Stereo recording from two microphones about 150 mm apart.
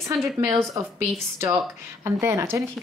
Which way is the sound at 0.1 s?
20° right (ahead or behind).